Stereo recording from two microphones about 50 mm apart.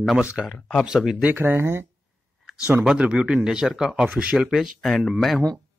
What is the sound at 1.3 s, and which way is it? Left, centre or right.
Speech, right.